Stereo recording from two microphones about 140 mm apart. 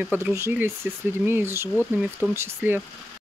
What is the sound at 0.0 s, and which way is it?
Speech, 15° right (ahead or behind).